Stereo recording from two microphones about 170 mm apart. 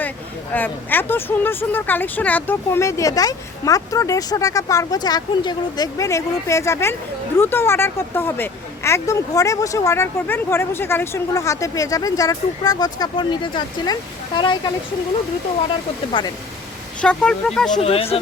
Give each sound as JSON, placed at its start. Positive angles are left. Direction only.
{"t": 0.5, "sound": "speech", "side_deg": 10}
{"t": 16.2, "sound": "speech", "side_deg": 30}
{"t": 17.0, "sound": "speech", "side_deg": 5}
{"t": 17.7, "sound": "speech", "side_deg": 35}